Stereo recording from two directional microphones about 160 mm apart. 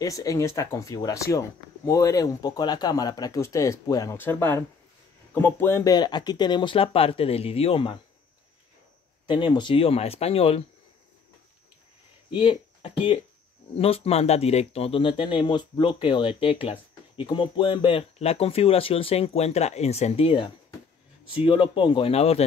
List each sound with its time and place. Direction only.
0.0 s speech: 20° left (ahead or behind)
9.3 s speech: 30° left (ahead or behind)
12.4 s speech: 30° left (ahead or behind)